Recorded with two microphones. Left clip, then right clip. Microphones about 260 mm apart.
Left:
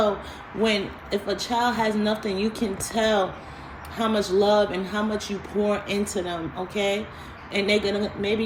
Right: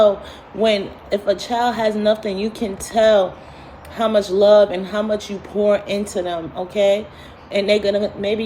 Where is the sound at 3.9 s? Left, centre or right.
Right.